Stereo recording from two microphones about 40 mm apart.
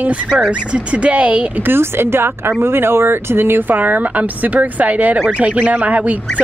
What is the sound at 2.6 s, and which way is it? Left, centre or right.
Speech, right.